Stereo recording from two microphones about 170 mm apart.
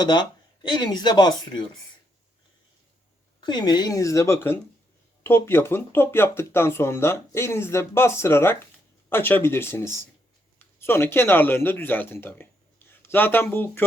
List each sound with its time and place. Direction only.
0.0 s speech: 25° left (ahead or behind)
3.4 s speech: 25° left (ahead or behind)